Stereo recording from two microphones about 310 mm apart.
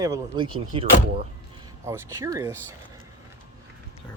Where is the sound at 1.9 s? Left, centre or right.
Centre.